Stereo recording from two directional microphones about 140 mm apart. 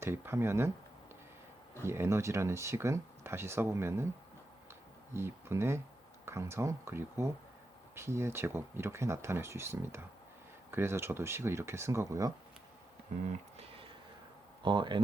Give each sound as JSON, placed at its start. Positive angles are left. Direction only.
{"t": 0.0, "sound": "speech", "side_deg": -15}
{"t": 1.8, "sound": "speech", "side_deg": -20}
{"t": 5.1, "sound": "speech", "side_deg": -20}
{"t": 14.6, "sound": "speech", "side_deg": -35}